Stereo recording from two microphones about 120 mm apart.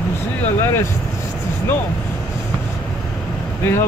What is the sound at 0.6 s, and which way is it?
Vehicle, 20° left (ahead or behind).